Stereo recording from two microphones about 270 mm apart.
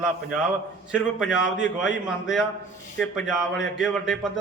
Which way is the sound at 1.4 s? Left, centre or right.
Left.